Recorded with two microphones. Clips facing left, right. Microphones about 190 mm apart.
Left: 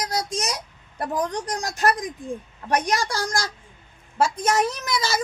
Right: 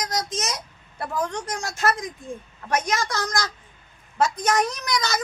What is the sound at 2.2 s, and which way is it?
Speech, 15° left (ahead or behind).